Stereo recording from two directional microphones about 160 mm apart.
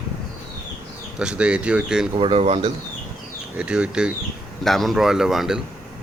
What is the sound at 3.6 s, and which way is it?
Speech, 5° right (ahead or behind).